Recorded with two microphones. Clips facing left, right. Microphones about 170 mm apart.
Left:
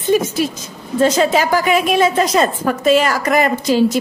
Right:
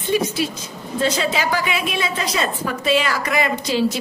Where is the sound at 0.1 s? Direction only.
45° left (ahead or behind).